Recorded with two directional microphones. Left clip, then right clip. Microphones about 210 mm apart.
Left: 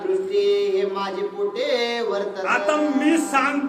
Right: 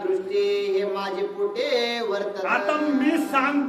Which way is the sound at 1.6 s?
15° right (ahead or behind).